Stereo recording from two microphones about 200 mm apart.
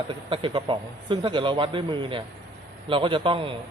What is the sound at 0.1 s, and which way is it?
A man's voice, 25° right (ahead or behind).